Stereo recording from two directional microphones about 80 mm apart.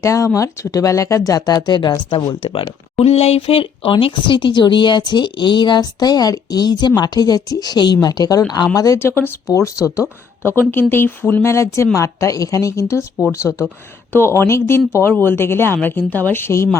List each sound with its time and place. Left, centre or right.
0.0 s a woman's voice: left
3.8 s a woman's voice: left
9.0 s speech: left
9.5 s speech: left
11.5 s a woman's voice: left
13.5 s a woman's voice: left